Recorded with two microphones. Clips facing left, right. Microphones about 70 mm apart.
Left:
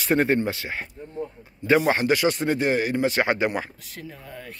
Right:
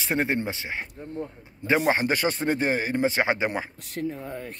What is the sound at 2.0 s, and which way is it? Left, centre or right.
Speech, right.